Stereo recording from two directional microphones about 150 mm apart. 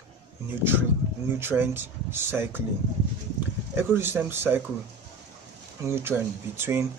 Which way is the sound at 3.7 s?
15° right (ahead or behind).